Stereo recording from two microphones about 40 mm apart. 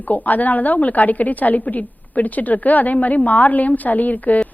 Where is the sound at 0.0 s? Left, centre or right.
Left.